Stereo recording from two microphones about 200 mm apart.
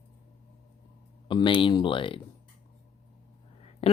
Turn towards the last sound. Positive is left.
turn(degrees=30)  # may be behind; listen again after turning